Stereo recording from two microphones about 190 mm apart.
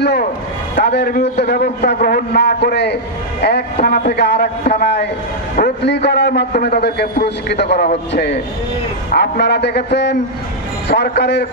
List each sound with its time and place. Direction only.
0.0 s a man's voice: 60° left (ahead or behind)